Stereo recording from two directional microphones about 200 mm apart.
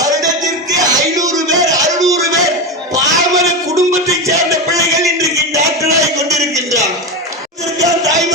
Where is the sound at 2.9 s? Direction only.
15° right (ahead or behind).